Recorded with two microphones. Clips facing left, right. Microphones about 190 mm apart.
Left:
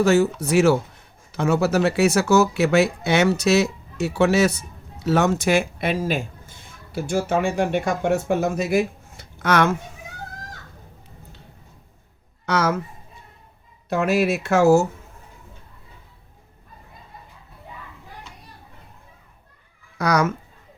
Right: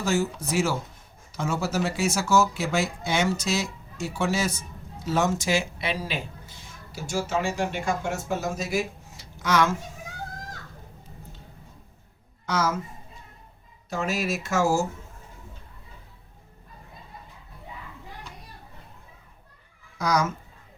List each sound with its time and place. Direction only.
0.0 s speech: 65° left (ahead or behind)
12.5 s speech: 65° left (ahead or behind)
13.9 s speech: 65° left (ahead or behind)
20.0 s speech: 65° left (ahead or behind)